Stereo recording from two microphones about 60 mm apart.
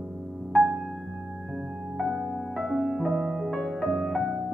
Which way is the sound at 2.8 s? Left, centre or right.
Centre.